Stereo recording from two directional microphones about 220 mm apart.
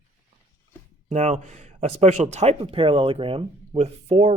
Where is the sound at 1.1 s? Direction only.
30° right (ahead or behind).